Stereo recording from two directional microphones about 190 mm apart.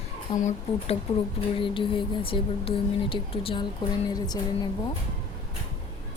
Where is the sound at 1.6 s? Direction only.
25° left (ahead or behind).